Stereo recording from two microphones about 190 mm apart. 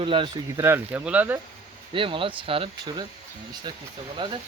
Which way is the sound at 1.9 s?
25° right (ahead or behind).